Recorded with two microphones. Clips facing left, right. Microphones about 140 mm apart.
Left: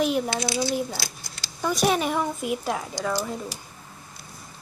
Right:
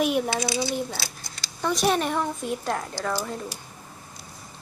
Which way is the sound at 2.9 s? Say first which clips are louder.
Left 1 dB; 15° left (ahead or behind).